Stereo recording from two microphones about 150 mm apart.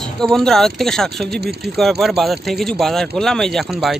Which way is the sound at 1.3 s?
90° right.